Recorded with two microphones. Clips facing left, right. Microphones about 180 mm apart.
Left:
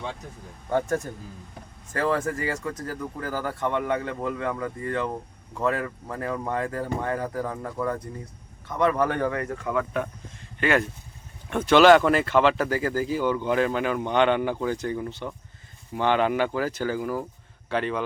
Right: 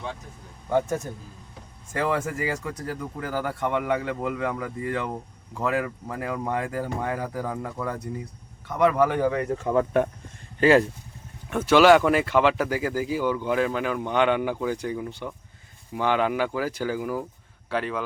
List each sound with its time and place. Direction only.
0.7 s speech: 10° right (ahead or behind)
9.4 s speech: 20° right (ahead or behind)
10.6 s speech: 30° right (ahead or behind)
11.4 s speech: 5° right (ahead or behind)